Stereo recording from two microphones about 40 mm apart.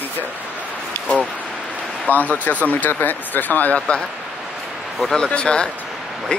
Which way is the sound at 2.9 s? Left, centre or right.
Left.